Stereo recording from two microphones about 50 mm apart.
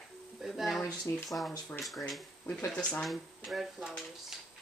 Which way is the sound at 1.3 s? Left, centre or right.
Left.